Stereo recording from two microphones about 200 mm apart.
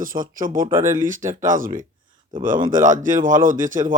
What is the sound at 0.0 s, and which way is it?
A man's voice, 45° right (ahead or behind).